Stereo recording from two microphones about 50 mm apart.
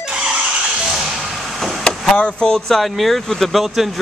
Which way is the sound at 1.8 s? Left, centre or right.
Centre.